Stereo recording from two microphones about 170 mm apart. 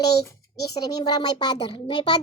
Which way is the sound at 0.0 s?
20° left (ahead or behind).